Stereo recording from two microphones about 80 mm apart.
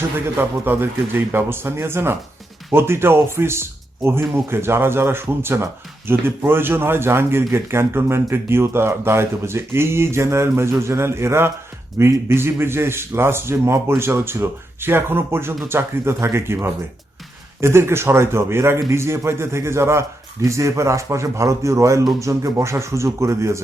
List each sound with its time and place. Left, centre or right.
0.3 s a man's voice: right